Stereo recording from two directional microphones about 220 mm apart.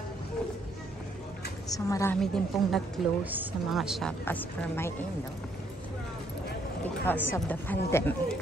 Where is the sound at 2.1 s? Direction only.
Centre (ahead or behind).